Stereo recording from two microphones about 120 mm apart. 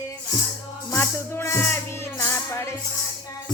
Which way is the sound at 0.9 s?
20° left (ahead or behind).